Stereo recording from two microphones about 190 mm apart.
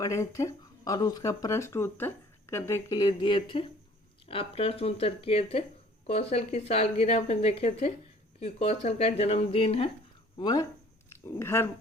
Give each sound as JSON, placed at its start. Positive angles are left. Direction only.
{"t": 0.0, "sound": "a woman's voice", "side_deg": 15}